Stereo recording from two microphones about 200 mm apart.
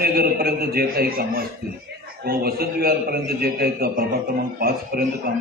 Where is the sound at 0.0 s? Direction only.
50° right (ahead or behind).